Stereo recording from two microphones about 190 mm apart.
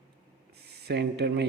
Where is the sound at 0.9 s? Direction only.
60° right (ahead or behind).